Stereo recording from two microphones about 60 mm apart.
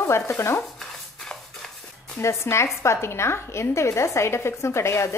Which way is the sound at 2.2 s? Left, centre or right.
Left.